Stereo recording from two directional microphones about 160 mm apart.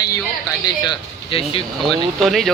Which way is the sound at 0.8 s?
35° left (ahead or behind).